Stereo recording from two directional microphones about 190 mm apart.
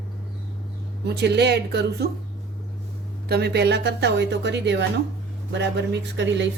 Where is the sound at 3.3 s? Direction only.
60° right (ahead or behind).